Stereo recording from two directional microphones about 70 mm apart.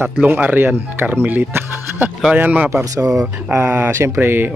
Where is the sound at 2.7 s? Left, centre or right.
Right.